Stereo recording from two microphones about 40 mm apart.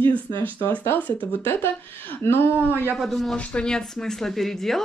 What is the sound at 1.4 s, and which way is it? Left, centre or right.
A woman's voice, left.